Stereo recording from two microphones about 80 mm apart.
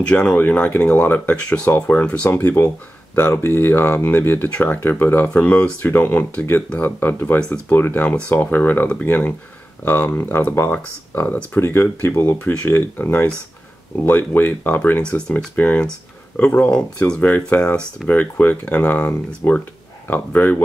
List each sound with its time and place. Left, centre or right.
0.1 s speech: centre
2.4 s speech: left
7.3 s speech: centre
7.7 s speech: left; by 18.0 s centre
18.0 s speech: left